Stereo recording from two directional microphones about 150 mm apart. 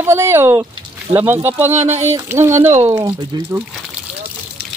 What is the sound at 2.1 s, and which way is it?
Speech, 15° right (ahead or behind).